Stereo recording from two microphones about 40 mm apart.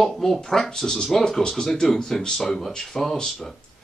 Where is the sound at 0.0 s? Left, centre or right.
Centre.